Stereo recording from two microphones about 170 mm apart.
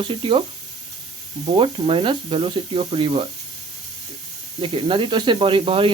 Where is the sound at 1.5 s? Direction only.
30° right (ahead or behind).